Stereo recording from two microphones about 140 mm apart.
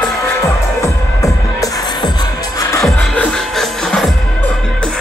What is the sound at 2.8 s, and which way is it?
Music, 5° left (ahead or behind).